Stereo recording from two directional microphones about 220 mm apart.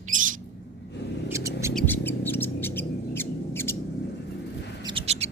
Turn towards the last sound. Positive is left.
turn(degrees=-30)  # may be behind; listen again after turning